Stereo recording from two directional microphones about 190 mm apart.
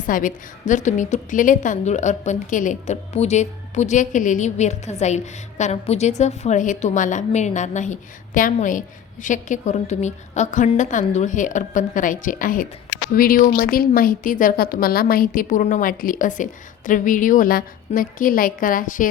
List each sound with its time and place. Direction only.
0.0 s a woman's voice: 45° left (ahead or behind)